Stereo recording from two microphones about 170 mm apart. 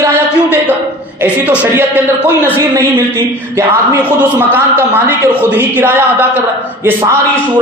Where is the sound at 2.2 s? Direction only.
20° right (ahead or behind).